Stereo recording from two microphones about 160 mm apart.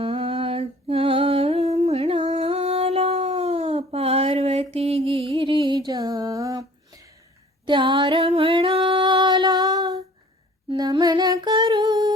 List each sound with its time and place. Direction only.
0.0 s music: 35° right (ahead or behind)
10.7 s humming: 25° right (ahead or behind)